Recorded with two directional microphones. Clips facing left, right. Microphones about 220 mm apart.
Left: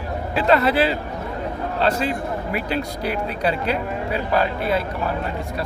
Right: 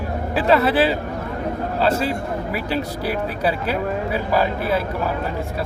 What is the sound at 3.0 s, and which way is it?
Speech, 5° right (ahead or behind).